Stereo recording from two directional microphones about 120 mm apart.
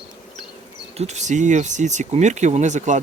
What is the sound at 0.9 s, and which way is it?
Speech, 70° right (ahead or behind).